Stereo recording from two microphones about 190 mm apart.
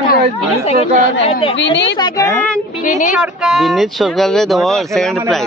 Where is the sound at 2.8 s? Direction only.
40° left (ahead or behind).